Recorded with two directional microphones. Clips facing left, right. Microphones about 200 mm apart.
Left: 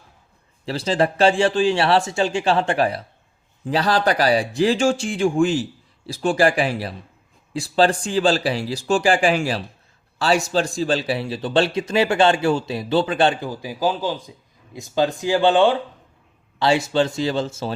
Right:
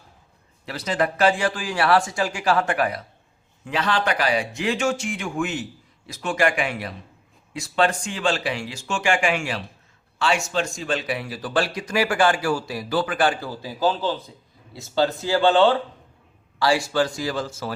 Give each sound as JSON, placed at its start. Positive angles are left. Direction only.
{"t": 0.6, "sound": "speech", "side_deg": 30}